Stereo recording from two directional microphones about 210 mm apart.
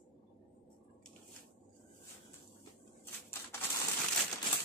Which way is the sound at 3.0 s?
10° left (ahead or behind).